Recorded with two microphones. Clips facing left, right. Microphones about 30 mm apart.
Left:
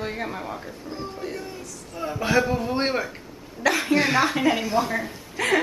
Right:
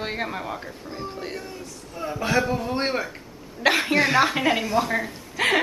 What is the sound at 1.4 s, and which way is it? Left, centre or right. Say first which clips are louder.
Speech: even; centre.